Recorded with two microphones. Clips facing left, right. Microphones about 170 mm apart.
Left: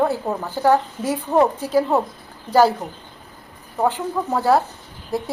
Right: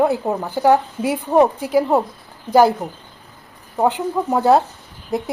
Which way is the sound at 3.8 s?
20° right (ahead or behind).